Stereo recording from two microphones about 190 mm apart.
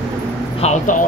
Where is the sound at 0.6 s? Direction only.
40° left (ahead or behind).